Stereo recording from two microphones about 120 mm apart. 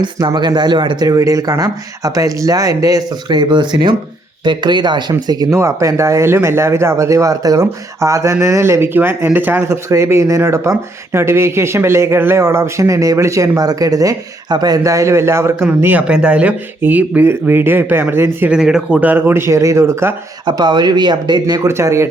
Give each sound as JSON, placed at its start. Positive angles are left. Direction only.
{"t": 0.0, "sound": "speech", "side_deg": -35}
{"t": 18.5, "sound": "speech", "side_deg": -5}
{"t": 20.4, "sound": "speech", "side_deg": -40}
{"t": 21.7, "sound": "speech", "side_deg": -25}